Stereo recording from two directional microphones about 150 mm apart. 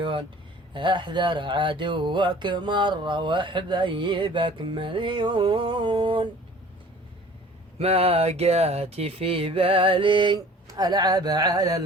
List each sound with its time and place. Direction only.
0.0 s a sound: 35° right (ahead or behind)
0.7 s speech: 30° right (ahead or behind)
7.8 s speech: 40° right (ahead or behind); by 11.9 s 25° right (ahead or behind)